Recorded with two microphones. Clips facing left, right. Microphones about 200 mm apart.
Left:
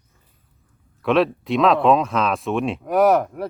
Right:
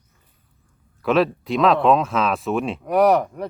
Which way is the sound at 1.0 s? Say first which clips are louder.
Even; centre (ahead or behind).